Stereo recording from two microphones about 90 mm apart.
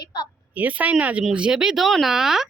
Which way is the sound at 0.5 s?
15° right (ahead or behind).